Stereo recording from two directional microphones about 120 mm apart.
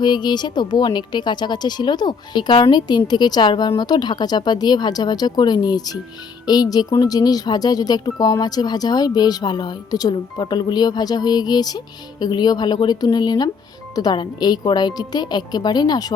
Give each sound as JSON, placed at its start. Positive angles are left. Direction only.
{"t": 0.0, "sound": "speech", "side_deg": 40}
{"t": 6.4, "sound": "music", "side_deg": 35}
{"t": 7.0, "sound": "speech", "side_deg": 35}